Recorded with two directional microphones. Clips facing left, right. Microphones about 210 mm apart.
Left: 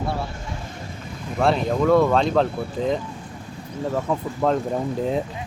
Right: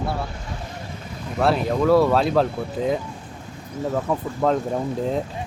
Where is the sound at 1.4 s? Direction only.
5° right (ahead or behind).